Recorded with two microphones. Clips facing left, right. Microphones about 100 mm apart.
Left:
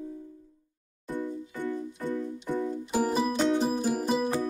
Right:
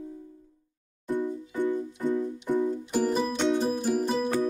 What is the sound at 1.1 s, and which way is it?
Music, 20° right (ahead or behind).